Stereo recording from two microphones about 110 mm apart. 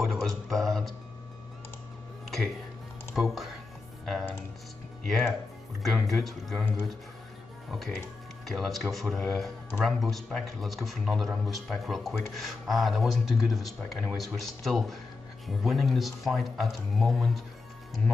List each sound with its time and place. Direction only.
0.0 s music: centre (ahead or behind)
3.2 s a man's voice: centre (ahead or behind)
4.0 s music: centre (ahead or behind)
5.0 s a man's voice: centre (ahead or behind)
8.5 s a man's voice: centre (ahead or behind)